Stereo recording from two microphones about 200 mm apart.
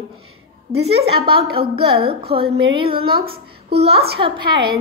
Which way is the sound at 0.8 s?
30° right (ahead or behind).